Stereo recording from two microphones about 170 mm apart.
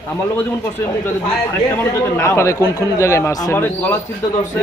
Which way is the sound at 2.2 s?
15° left (ahead or behind).